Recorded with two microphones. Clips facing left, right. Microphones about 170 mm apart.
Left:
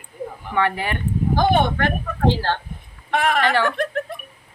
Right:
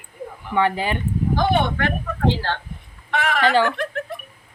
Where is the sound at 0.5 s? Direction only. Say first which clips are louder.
Right 2 dB; 20° right (ahead or behind).